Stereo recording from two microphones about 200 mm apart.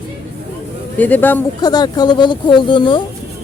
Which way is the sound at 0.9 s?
10° left (ahead or behind).